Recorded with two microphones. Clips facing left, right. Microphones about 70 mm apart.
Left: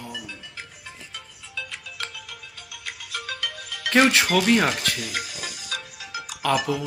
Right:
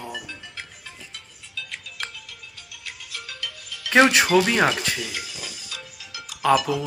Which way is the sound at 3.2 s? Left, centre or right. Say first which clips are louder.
Left 4 dB; left.